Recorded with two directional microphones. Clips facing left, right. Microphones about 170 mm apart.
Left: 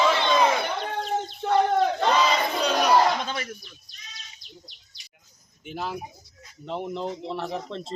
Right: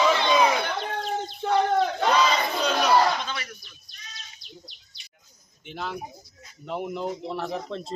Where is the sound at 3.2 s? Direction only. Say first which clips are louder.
Left 3 dB; 45° left (ahead or behind).